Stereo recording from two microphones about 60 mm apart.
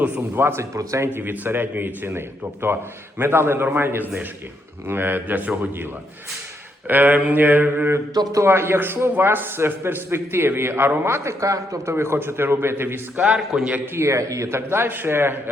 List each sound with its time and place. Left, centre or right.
0.0 s speech: right
0.8 s speech: right
1.1 s speech: right
6.8 s speech: right
8.1 s a man's voice: right
8.4 s a man's voice: right
11.9 s speech: right
13.5 s a man's voice: right
13.9 s speech: right